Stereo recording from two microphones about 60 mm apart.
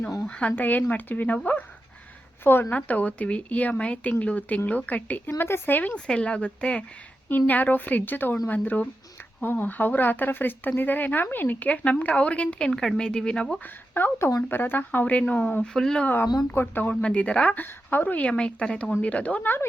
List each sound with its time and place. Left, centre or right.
0.3 s speech: left
2.4 s a woman's voice: left
2.6 s speech: left
5.4 s a woman's voice: left
5.9 s speech: centre
7.3 s a woman's voice: left; by 13.6 s centre
13.9 s a woman's voice: left
15.6 s speech: centre
16.5 s a woman's voice: left
16.9 s speech: centre